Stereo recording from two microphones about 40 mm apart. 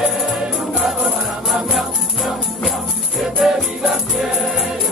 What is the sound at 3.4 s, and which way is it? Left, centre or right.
Music, centre.